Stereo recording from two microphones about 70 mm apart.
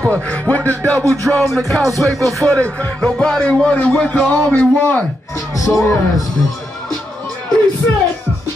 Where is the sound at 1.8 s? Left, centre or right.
Right.